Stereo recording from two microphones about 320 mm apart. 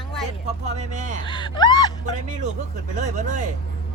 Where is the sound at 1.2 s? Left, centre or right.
Centre.